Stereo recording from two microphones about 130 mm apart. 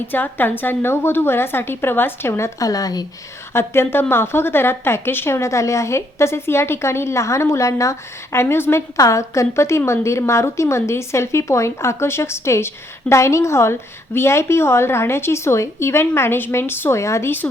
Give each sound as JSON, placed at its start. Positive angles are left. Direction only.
{"t": 0.1, "sound": "a woman's voice", "side_deg": 15}
{"t": 3.5, "sound": "a woman's voice", "side_deg": 20}